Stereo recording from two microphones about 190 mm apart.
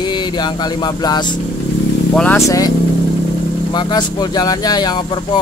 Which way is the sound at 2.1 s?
10° left (ahead or behind).